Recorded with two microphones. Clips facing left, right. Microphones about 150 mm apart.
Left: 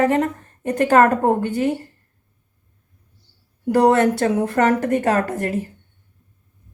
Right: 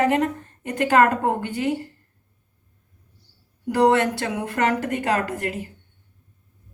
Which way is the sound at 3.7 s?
45° left (ahead or behind).